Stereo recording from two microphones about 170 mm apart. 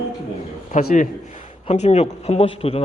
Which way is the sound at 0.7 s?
50° left (ahead or behind).